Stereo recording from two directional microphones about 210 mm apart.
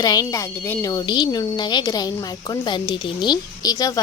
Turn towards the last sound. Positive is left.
turn(degrees=15)  # may be behind; listen again after turning